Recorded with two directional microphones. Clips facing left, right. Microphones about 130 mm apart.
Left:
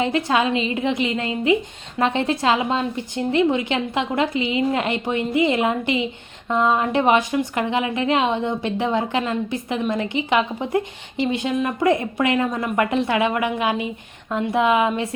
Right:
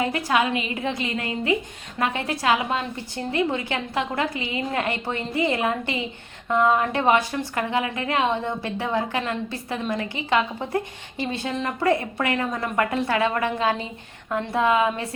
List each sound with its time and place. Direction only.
0.0 s a woman's voice: 25° left (ahead or behind)